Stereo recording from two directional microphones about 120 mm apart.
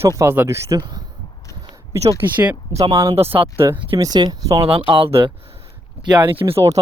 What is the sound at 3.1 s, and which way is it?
Speech, 50° right (ahead or behind).